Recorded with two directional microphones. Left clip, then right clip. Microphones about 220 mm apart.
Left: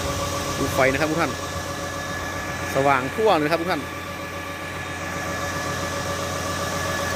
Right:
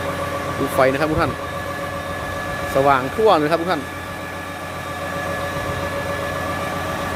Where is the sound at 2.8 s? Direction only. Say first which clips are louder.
Right 4 dB; 10° right (ahead or behind).